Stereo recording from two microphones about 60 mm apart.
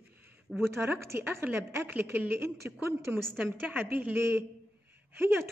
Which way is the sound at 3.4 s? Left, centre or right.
Right.